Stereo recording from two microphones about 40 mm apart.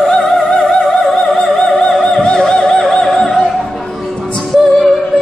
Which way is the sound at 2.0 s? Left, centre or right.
Centre.